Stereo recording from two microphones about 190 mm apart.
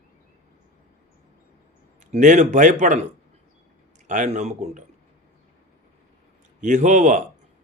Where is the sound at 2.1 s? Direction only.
40° right (ahead or behind).